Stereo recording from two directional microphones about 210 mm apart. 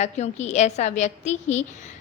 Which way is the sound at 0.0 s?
30° left (ahead or behind).